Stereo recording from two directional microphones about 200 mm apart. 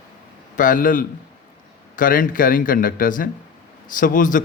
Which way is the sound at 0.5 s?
45° left (ahead or behind).